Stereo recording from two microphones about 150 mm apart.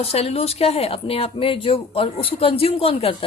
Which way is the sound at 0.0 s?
45° left (ahead or behind).